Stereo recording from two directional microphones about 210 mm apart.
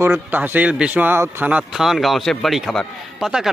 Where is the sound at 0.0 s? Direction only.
10° right (ahead or behind).